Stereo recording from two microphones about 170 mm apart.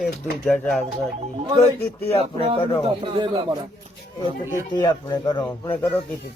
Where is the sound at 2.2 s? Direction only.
35° right (ahead or behind).